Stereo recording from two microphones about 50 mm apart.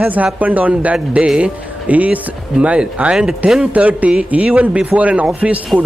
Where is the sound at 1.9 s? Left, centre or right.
Right.